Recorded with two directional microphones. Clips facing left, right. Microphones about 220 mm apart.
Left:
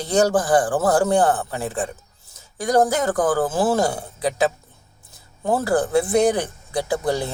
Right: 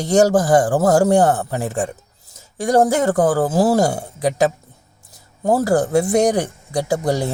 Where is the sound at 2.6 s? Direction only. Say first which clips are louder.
Right 3 dB; 25° right (ahead or behind).